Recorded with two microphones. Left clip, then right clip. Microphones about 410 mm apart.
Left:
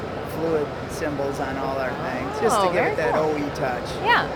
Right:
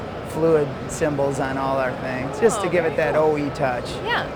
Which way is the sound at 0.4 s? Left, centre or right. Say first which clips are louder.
Right 6 dB; right.